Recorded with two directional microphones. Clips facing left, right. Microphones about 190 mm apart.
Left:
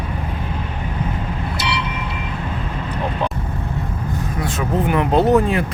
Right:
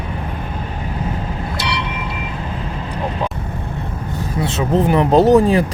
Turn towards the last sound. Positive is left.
turn(degrees=-35)  # may be behind; listen again after turning